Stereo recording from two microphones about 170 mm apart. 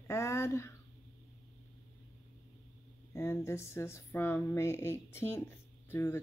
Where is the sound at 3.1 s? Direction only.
15° left (ahead or behind).